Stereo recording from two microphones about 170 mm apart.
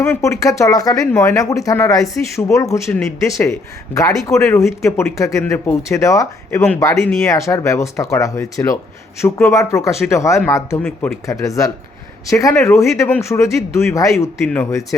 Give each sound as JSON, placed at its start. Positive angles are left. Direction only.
{"t": 0.0, "sound": "speech", "side_deg": 15}
{"t": 4.3, "sound": "speech", "side_deg": 15}